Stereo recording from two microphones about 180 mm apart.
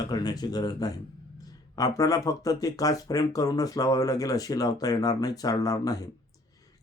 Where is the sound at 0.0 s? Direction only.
20° left (ahead or behind).